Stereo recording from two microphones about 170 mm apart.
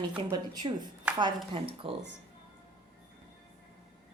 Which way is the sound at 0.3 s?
25° right (ahead or behind).